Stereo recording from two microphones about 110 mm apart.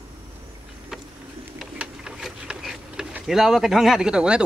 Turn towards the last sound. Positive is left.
turn(degrees=-10)  # may be behind; listen again after turning